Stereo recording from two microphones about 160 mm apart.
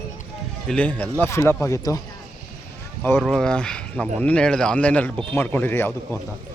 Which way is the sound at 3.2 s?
5° left (ahead or behind).